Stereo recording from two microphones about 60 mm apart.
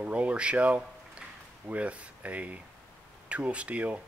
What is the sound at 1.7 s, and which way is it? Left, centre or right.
Speech, right.